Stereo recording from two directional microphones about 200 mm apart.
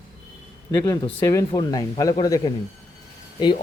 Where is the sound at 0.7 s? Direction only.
15° left (ahead or behind).